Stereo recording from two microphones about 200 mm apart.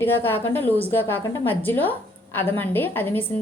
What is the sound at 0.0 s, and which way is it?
A woman's voice, 10° left (ahead or behind).